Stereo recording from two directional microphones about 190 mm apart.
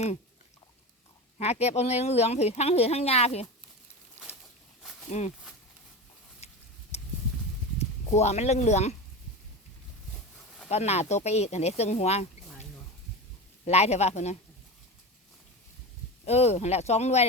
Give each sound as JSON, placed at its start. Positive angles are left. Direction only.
{"t": 1.4, "sound": "speech", "side_deg": 35}
{"t": 4.8, "sound": "a sound", "side_deg": 0}
{"t": 6.4, "sound": "a sound", "side_deg": 35}
{"t": 7.8, "sound": "speech", "side_deg": 35}
{"t": 10.7, "sound": "speech", "side_deg": 35}
{"t": 13.7, "sound": "speech", "side_deg": 35}
{"t": 16.2, "sound": "speech", "side_deg": 35}